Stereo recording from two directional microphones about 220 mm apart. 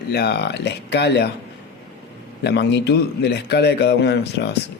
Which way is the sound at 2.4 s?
50° left (ahead or behind).